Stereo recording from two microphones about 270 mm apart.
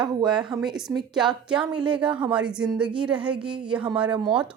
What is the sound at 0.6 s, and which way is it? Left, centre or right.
A woman's voice, centre.